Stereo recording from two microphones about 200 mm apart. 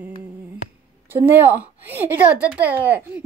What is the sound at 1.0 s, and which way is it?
A woman's voice, 10° right (ahead or behind).